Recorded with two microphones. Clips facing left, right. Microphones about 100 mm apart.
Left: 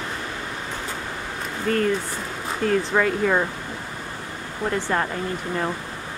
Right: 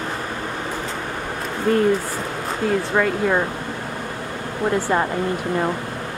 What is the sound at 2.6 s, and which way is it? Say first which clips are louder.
Speech: right 1 dB; 5° right (ahead or behind).